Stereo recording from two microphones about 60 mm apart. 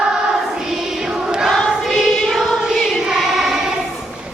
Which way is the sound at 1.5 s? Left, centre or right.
Centre.